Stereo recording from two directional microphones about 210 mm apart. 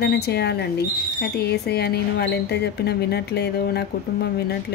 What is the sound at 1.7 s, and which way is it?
Speech, 50° left (ahead or behind).